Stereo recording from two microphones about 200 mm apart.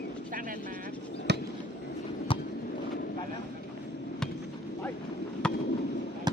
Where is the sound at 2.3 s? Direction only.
25° left (ahead or behind).